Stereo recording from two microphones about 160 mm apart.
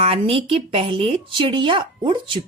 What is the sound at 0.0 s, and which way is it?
Speech, 35° right (ahead or behind).